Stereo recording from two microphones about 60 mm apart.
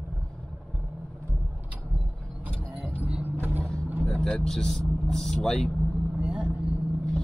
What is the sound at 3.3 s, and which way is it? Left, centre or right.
Vehicle, right.